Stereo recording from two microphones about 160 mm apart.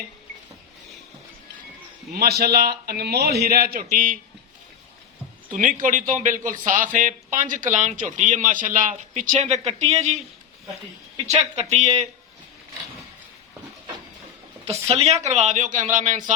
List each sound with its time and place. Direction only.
2.1 s a man's voice: 75° right (ahead or behind)
5.5 s speech: 55° right (ahead or behind)
11.3 s speech: 45° right (ahead or behind)
14.7 s speech: 40° right (ahead or behind)